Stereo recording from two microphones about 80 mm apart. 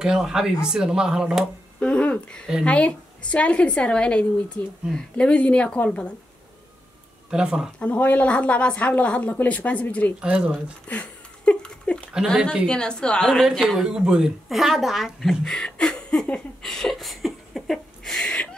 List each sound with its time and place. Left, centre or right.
0.0 s speech: centre
1.8 s speech: centre
7.2 s speech: centre
7.8 s speech: centre
10.2 s speech: centre
10.9 s a sound: centre
12.6 s speech: centre